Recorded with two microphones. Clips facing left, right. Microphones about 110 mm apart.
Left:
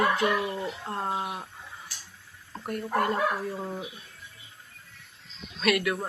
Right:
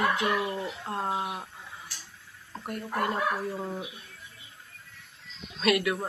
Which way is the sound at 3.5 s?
Centre (ahead or behind).